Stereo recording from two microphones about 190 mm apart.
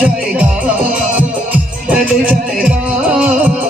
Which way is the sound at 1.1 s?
10° right (ahead or behind).